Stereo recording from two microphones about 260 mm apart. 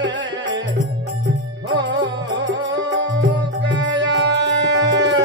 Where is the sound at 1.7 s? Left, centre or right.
Right.